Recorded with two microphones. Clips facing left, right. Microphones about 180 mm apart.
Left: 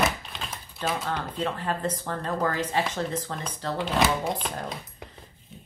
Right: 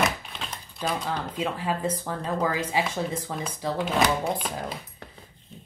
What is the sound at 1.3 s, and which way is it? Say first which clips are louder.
Speech: right 2 dB; 10° right (ahead or behind).